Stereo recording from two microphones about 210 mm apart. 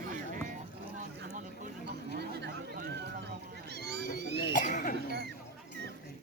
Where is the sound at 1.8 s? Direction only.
50° right (ahead or behind).